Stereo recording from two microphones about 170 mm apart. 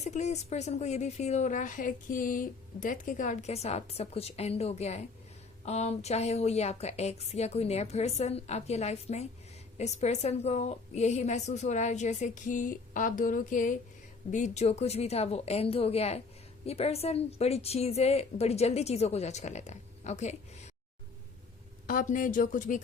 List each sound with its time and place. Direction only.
0.0 s a woman's voice: 40° left (ahead or behind)
21.8 s a woman's voice: 55° left (ahead or behind)